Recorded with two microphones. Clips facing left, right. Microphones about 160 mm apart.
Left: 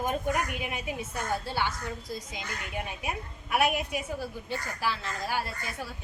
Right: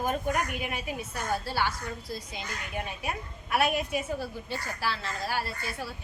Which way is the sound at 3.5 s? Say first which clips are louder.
Even; 15° left (ahead or behind).